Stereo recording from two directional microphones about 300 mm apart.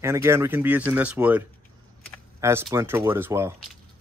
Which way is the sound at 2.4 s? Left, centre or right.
Centre.